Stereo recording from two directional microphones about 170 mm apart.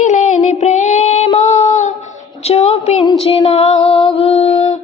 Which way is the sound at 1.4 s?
45° left (ahead or behind).